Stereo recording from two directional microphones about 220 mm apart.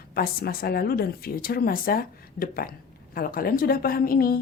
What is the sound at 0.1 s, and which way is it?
A woman's voice, 45° left (ahead or behind).